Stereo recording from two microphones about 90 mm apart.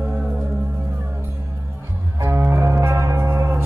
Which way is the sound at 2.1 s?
30° right (ahead or behind).